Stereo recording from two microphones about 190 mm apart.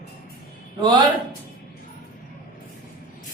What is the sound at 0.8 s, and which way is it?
Speech, 25° right (ahead or behind).